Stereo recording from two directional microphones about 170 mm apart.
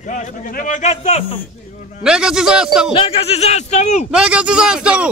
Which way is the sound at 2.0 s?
5° right (ahead or behind).